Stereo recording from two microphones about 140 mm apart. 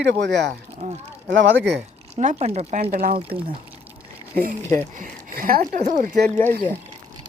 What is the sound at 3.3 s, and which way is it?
Speech, 40° right (ahead or behind).